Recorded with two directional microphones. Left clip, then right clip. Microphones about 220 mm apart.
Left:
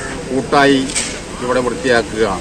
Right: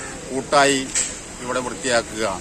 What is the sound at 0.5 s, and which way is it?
Speech, 30° right (ahead or behind).